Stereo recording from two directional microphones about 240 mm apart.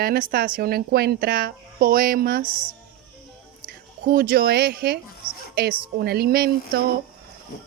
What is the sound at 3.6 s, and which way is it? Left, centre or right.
A woman's voice, right.